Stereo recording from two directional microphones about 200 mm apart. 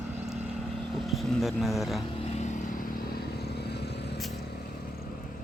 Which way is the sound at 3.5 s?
55° left (ahead or behind).